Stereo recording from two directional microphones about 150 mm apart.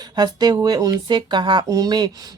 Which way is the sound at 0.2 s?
30° right (ahead or behind).